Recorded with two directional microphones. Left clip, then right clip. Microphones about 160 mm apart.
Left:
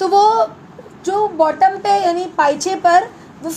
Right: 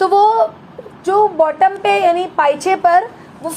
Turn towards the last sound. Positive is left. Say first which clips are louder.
# right 1 dB
turn(degrees=-25)  # may be behind; listen again after turning